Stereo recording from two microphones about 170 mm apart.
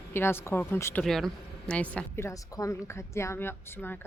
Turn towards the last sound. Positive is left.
turn(degrees=15)  # may be behind; listen again after turning